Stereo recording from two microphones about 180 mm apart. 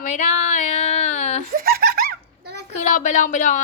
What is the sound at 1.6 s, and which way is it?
Giggle, 55° right (ahead or behind).